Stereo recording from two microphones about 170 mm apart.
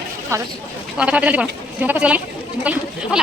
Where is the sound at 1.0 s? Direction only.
5° right (ahead or behind).